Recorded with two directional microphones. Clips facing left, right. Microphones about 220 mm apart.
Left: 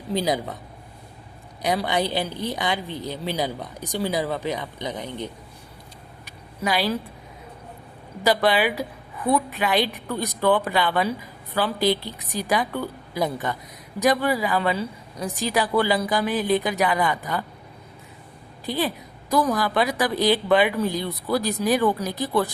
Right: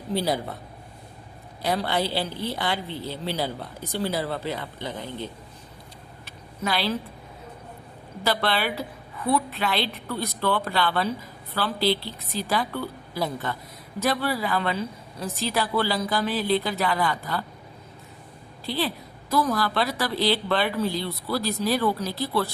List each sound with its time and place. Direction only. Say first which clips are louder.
0.1 s a woman's voice: left 2 dB; 15° left (ahead or behind)
1.6 s a woman's voice: left 2 dB; 15° left (ahead or behind)
6.2 s a sound: left 3 dB; 15° left (ahead or behind)
8.2 s a woman's voice: left 5 dB; 15° left (ahead or behind)
18.6 s a woman's voice: left 2 dB; 15° left (ahead or behind)